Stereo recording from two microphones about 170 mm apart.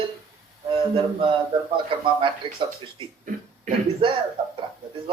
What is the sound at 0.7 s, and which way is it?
A man's voice, 30° right (ahead or behind).